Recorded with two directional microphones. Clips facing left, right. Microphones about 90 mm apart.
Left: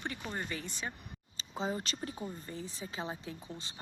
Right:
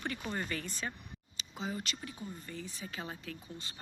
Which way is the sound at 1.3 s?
30° left (ahead or behind).